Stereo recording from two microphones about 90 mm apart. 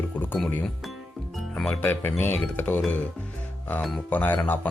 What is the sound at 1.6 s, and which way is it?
Speech, 25° left (ahead or behind).